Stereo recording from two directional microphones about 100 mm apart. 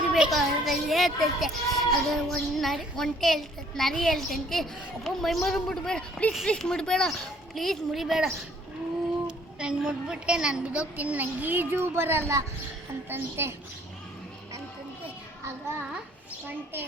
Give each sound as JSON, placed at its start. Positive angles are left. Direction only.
{"t": 0.0, "sound": "a child's voice", "side_deg": -5}